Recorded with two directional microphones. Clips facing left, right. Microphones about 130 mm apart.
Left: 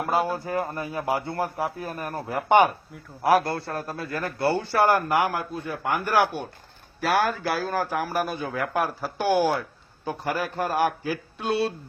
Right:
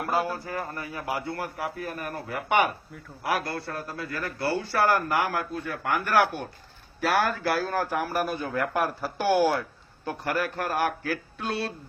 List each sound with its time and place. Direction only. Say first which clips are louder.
0.1 s a man's voice: left 3 dB; 20° left (ahead or behind)